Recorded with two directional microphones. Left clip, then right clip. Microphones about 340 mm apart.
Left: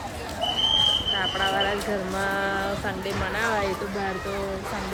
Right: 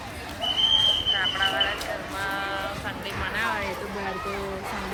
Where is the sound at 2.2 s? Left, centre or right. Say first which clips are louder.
Left 3 dB; left.